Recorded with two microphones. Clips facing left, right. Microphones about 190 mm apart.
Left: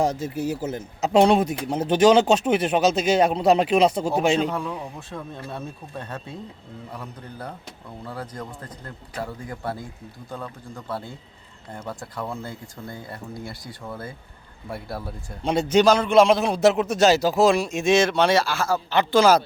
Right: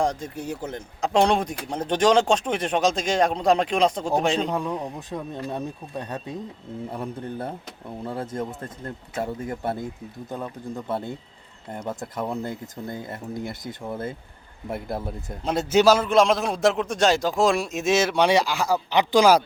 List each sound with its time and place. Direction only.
0.0 s speech: 5° left (ahead or behind)
4.4 s speech: 20° right (ahead or behind)
15.4 s speech: 5° right (ahead or behind)